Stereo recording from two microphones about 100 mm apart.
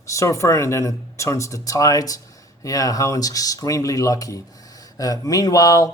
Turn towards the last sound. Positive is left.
turn(degrees=35)  # may be behind; listen again after turning